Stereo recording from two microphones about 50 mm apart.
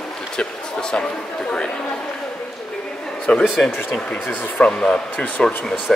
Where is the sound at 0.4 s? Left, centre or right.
Centre.